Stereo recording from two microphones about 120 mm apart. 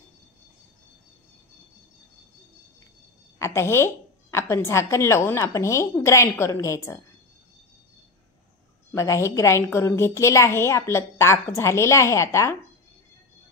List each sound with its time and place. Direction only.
3.3 s a woman's voice: 20° left (ahead or behind)
8.9 s a woman's voice: 25° left (ahead or behind)